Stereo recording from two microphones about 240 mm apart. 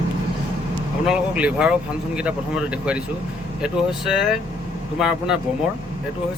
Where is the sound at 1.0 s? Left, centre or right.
Centre.